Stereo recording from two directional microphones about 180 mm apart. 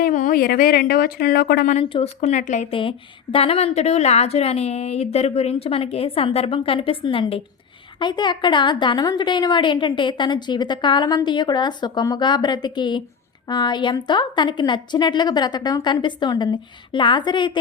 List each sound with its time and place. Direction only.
0.0 s speech: 45° left (ahead or behind)
1.8 s a woman's voice: 30° left (ahead or behind)
2.3 s a woman's voice: 45° left (ahead or behind); by 17.6 s 25° left (ahead or behind)